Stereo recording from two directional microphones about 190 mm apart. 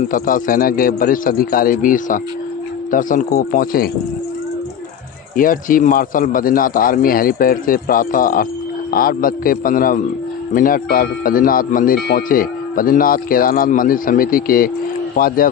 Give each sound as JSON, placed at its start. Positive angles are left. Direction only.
{"t": 0.1, "sound": "speech", "side_deg": 50}
{"t": 5.3, "sound": "speech", "side_deg": 45}